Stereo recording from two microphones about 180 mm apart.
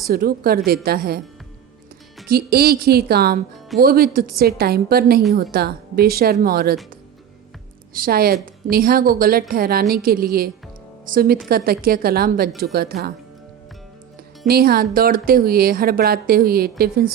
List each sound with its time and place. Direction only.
0.1 s speech: 55° right (ahead or behind)
2.2 s speech: 55° right (ahead or behind)
7.9 s a woman's voice: 55° right (ahead or behind)
14.4 s speech: 60° right (ahead or behind)